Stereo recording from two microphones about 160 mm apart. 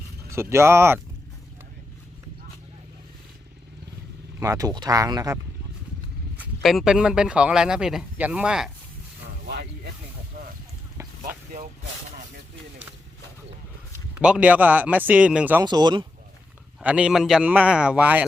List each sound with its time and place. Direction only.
0.3 s a man's voice: 15° right (ahead or behind)
4.4 s speech: 20° right (ahead or behind)
6.6 s speech: centre (ahead or behind)
9.5 s vehicle: 80° right
14.2 s a man's voice: 5° right (ahead or behind)
15.6 s speech: 25° right (ahead or behind)
16.8 s a man's voice: 5° right (ahead or behind)